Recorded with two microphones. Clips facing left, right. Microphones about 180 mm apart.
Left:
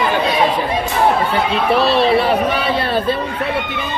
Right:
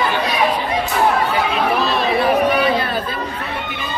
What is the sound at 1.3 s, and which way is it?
Chatter, 30° left (ahead or behind).